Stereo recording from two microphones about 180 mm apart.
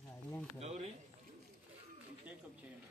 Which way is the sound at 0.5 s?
40° right (ahead or behind).